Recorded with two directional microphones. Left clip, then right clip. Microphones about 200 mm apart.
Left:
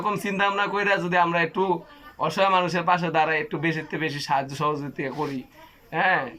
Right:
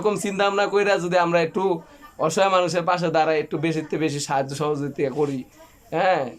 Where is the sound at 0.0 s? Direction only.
10° right (ahead or behind).